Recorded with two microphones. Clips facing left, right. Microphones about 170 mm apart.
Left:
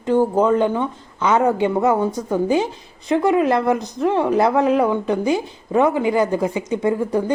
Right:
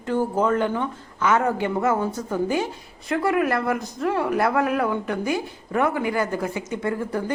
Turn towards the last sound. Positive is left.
turn(degrees=20)  # may be behind; listen again after turning